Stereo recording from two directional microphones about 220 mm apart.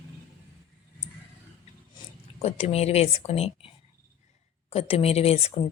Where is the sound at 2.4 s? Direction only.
30° left (ahead or behind).